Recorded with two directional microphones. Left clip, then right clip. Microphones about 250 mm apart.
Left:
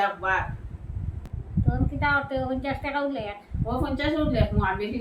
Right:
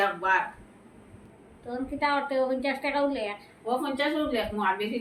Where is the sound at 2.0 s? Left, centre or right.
Centre.